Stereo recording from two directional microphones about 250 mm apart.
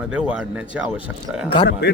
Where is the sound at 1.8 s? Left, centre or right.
Left.